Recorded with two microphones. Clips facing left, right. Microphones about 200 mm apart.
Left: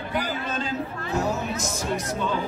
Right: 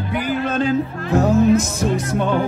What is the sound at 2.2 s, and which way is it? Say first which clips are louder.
Speech: right 10 dB; 60° right (ahead or behind).